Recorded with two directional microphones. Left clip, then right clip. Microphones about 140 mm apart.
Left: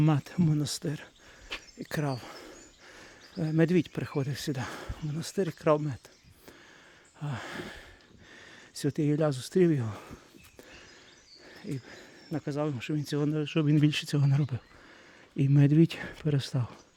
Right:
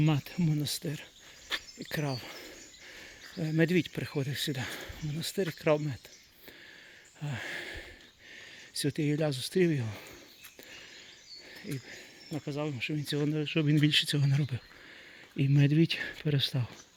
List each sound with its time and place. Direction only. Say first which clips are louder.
0.0 s speech: left 3 dB; 40° left (ahead or behind)
1.8 s speech: left 2 dB; 35° left (ahead or behind)
7.2 s speech: even; 25° left (ahead or behind)
8.9 s speech: left 4 dB; 35° left (ahead or behind)
11.5 s a sound: left 2 dB; 35° left (ahead or behind)
12.5 s speech: left 4 dB; 55° left (ahead or behind)
12.9 s speech: left 2 dB; 30° left (ahead or behind)